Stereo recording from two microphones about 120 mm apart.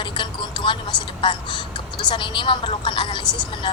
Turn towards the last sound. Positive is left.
turn(degrees=40)  # may be behind; listen again after turning